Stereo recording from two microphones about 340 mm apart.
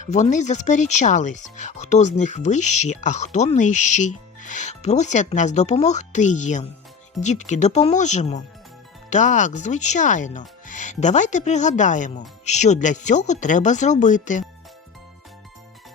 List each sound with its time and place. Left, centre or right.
0.0 s speech: left